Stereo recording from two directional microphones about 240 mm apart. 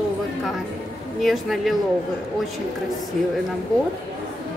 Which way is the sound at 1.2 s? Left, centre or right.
Centre.